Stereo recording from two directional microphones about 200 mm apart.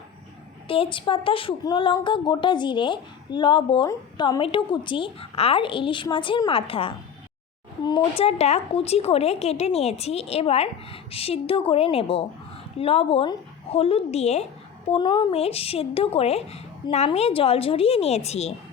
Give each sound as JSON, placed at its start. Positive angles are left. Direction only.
{"t": 0.7, "sound": "speech", "side_deg": 25}